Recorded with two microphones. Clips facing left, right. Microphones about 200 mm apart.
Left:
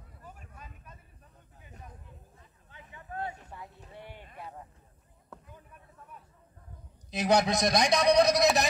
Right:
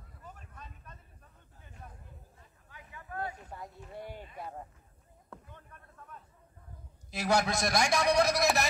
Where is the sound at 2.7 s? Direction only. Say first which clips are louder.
Left 1 dB; 25° left (ahead or behind).